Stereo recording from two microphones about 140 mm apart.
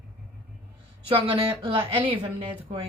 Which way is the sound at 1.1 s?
40° right (ahead or behind).